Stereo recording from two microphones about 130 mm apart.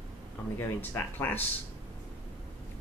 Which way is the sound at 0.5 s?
15° left (ahead or behind).